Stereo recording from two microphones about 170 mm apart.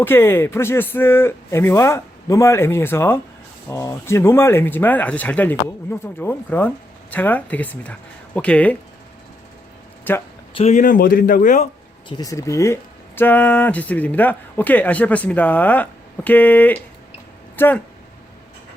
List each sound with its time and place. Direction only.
0.0 s speech: 15° left (ahead or behind)
10.0 s speech: 10° left (ahead or behind)
10.5 s a man's voice: 40° left (ahead or behind)
12.0 s speech: 25° left (ahead or behind)